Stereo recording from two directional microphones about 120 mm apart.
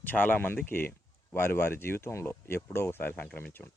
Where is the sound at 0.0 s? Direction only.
15° left (ahead or behind).